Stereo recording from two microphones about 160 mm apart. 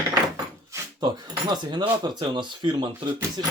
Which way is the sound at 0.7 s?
25° right (ahead or behind).